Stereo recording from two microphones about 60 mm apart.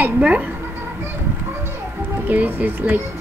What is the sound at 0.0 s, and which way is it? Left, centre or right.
Speech, right.